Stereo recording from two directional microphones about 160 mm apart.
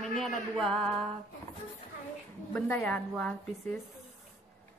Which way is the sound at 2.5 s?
10° left (ahead or behind).